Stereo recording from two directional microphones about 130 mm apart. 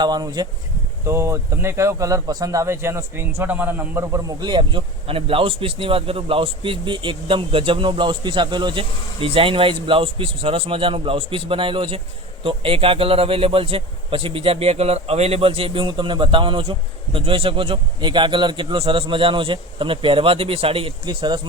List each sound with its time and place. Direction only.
0.0 s speech: 30° right (ahead or behind)
1.0 s a man's voice: 20° right (ahead or behind)
4.4 s a man's voice: 35° right (ahead or behind)